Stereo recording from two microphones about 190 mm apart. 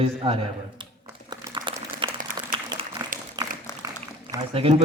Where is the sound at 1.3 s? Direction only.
20° right (ahead or behind).